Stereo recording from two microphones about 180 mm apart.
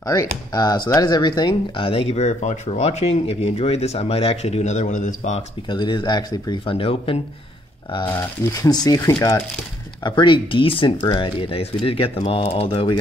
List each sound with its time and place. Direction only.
0.0 s speech: 20° left (ahead or behind); by 5.4 s 40° left (ahead or behind)
5.7 s speech: 25° left (ahead or behind)
8.1 s speech: 20° left (ahead or behind)